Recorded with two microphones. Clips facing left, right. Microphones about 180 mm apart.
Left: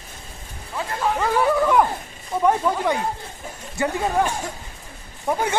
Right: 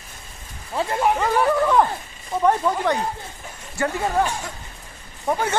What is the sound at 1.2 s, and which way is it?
Speech, 10° right (ahead or behind).